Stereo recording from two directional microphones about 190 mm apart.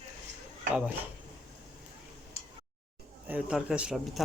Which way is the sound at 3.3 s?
5° right (ahead or behind).